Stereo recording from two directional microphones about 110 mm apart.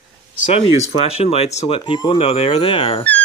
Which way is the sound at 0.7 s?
75° left (ahead or behind).